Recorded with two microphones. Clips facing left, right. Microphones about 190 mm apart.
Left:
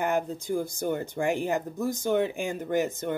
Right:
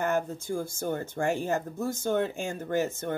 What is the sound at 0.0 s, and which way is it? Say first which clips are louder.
Speech: left 1 dB; 15° left (ahead or behind).